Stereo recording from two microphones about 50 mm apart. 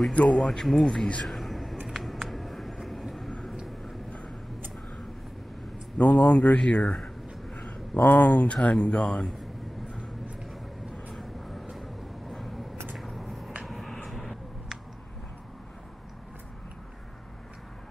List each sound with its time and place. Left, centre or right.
0.1 s speech: left
0.4 s speech: centre
1.2 s a sound: centre
3.6 s vehicle: centre
5.9 s speech: left
7.5 s a sound: left
7.9 s speech: left; by 9.3 s centre
11.1 s vehicle: centre
12.9 s a sound: centre
14.0 s vehicle: centre